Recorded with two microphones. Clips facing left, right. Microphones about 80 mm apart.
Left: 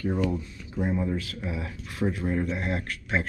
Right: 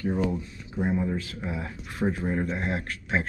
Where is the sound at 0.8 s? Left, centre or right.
Right.